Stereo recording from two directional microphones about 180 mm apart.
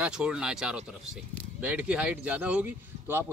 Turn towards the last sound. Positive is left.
turn(degrees=-10)  # may be behind; listen again after turning